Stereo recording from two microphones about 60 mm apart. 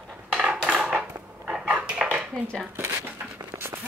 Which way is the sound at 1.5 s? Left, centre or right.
Right.